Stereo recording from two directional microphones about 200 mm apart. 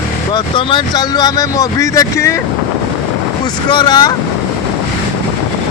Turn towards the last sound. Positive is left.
turn(degrees=20)  # may be behind; listen again after turning